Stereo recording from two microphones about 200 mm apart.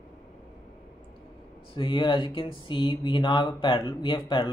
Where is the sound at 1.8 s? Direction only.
25° left (ahead or behind).